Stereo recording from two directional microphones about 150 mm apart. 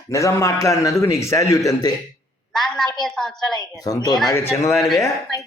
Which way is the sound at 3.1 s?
5° left (ahead or behind).